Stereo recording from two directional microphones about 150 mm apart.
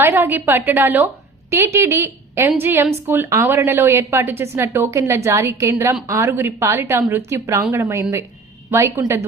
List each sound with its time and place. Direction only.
0.0 s a woman's voice: 15° right (ahead or behind)